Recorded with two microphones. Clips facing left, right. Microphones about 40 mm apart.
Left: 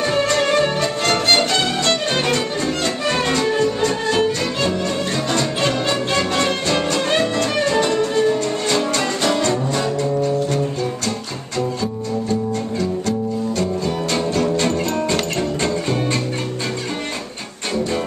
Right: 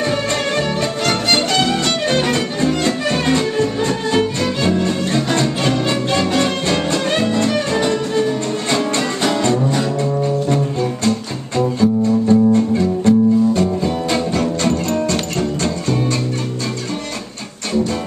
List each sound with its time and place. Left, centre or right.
1.0 s music: centre
4.6 s music: centre
5.6 s music: centre
11.5 s music: right
13.8 s music: centre
14.4 s music: centre